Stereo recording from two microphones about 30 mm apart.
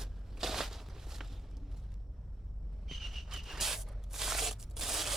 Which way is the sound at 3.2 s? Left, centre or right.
Centre.